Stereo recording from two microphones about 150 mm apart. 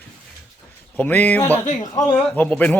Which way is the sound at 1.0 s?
10° left (ahead or behind).